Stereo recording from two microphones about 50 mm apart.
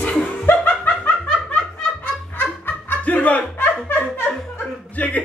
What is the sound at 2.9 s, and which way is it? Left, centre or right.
Music, left.